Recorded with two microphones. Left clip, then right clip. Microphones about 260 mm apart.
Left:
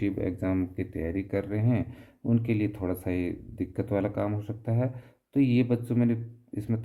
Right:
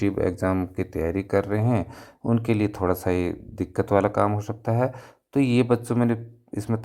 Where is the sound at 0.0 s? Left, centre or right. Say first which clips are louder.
Right 7 dB; centre.